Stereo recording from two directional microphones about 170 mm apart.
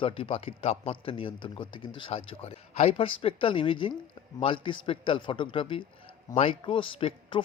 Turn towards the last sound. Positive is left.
turn(degrees=30)  # may be behind; listen again after turning